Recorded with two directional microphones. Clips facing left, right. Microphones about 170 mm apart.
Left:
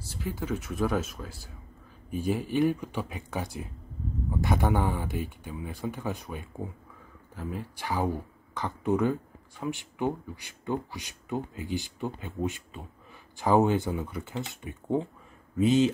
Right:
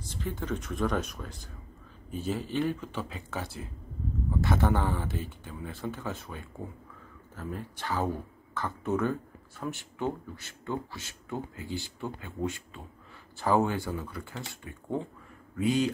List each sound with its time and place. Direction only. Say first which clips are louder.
0.0 s speech: left 1 dB; 10° left (ahead or behind)